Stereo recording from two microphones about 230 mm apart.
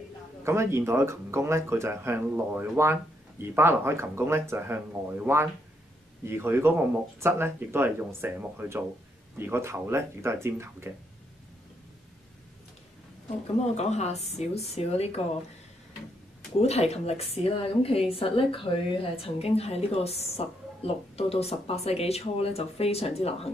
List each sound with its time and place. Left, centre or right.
0.4 s speech: centre
13.7 s a woman's voice: left
16.6 s a woman's voice: left